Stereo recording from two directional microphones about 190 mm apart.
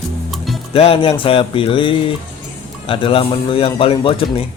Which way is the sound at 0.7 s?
30° left (ahead or behind).